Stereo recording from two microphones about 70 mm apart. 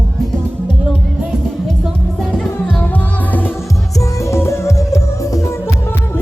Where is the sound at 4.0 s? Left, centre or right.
Left.